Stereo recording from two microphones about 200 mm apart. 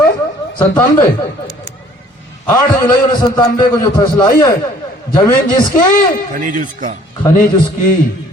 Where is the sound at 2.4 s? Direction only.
20° left (ahead or behind).